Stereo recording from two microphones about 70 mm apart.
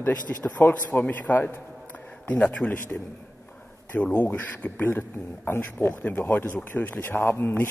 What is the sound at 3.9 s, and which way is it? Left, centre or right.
A man's voice, left.